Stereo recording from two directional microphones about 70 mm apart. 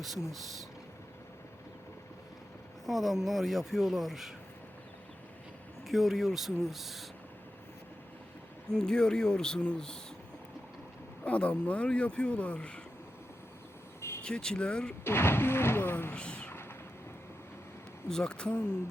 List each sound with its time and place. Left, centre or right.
0.0 s speech: centre
2.8 s speech: centre
5.9 s speech: centre
8.7 s speech: centre
11.2 s speech: centre
14.2 s speech: centre
15.0 s a sound: left
16.1 s a sound: centre
16.5 s vehicle: left
18.1 s speech: centre